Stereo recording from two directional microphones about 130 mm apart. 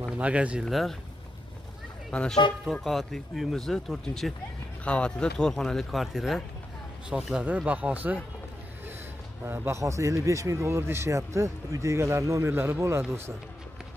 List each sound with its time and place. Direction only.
0.2 s speech: 10° right (ahead or behind)
2.0 s speech: 5° left (ahead or behind); by 8.2 s 10° right (ahead or behind)
9.5 s speech: 20° right (ahead or behind)